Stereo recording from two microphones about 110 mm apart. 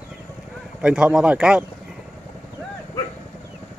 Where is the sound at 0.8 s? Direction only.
10° right (ahead or behind).